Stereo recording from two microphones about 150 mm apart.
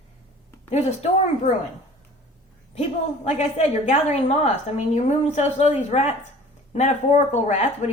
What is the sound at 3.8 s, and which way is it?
A woman's voice, 50° left (ahead or behind).